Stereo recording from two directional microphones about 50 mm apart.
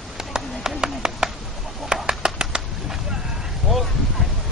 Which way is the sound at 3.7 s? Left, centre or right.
Centre.